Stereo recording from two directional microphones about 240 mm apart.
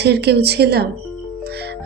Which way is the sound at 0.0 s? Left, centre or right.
Right.